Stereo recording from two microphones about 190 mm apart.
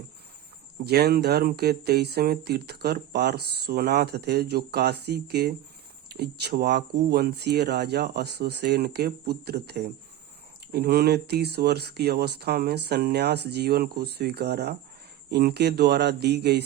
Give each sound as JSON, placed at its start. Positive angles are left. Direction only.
{"t": 0.9, "sound": "speech", "side_deg": -55}